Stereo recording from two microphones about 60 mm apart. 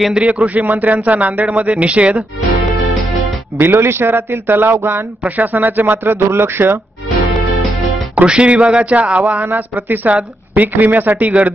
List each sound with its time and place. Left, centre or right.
0.1 s speech: centre
3.5 s speech: right
4.7 s speech: right
5.2 s speech: right
8.3 s speech: centre
9.4 s speech: right